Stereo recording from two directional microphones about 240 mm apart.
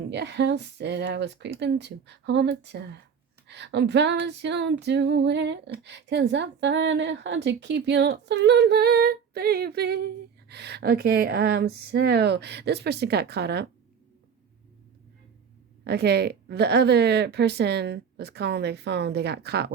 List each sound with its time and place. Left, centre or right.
0.1 s female singing: right
15.8 s female singing: right